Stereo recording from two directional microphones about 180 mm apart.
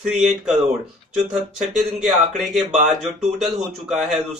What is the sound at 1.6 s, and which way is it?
Speech, centre (ahead or behind).